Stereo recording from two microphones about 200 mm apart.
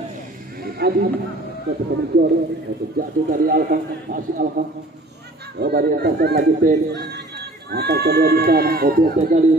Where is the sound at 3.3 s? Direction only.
45° right (ahead or behind).